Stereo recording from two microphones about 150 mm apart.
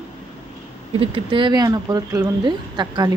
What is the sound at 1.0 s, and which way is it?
Speech, 35° right (ahead or behind).